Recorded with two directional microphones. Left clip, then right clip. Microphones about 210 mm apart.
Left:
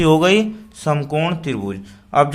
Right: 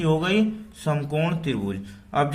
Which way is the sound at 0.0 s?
35° left (ahead or behind).